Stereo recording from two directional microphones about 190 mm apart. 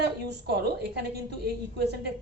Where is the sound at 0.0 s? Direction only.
60° right (ahead or behind).